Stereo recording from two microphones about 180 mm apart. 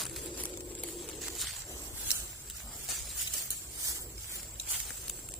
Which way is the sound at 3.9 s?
15° right (ahead or behind).